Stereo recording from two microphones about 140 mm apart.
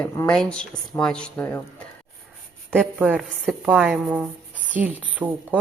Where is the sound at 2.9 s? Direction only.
5° right (ahead or behind).